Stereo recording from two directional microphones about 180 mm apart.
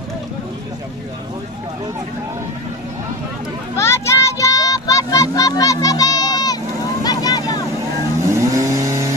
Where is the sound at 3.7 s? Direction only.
15° left (ahead or behind).